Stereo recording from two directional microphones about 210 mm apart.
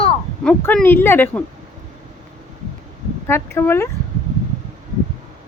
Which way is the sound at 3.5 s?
10° left (ahead or behind).